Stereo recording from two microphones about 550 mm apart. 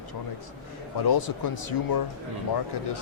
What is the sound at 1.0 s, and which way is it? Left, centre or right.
Speech, left.